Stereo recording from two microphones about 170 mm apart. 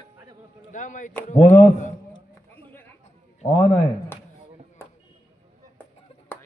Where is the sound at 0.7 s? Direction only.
50° left (ahead or behind).